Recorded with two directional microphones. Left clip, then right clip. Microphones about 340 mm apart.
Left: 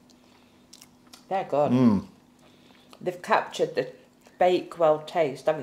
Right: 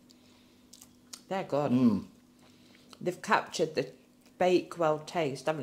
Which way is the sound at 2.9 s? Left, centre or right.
Right.